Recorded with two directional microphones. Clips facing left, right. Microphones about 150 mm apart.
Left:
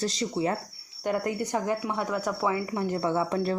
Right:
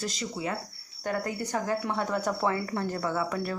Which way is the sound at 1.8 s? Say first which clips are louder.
Even; 10° left (ahead or behind).